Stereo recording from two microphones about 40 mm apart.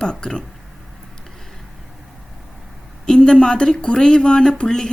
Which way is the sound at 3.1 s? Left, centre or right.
Left.